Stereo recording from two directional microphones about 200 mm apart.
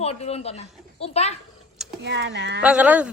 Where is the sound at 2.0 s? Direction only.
60° right (ahead or behind).